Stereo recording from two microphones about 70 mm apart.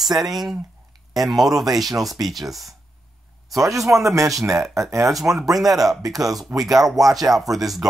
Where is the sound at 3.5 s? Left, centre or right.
Right.